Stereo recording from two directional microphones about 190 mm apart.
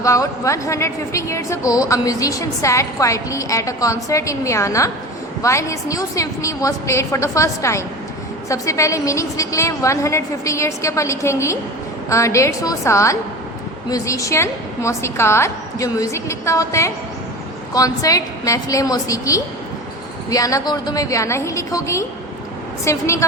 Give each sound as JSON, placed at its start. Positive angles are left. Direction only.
{"t": 0.0, "sound": "a woman's voice", "side_deg": 15}